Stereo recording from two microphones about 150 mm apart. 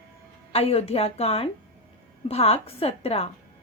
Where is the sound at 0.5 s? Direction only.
40° left (ahead or behind).